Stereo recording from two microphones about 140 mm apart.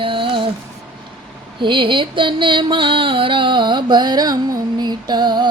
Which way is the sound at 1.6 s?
35° right (ahead or behind).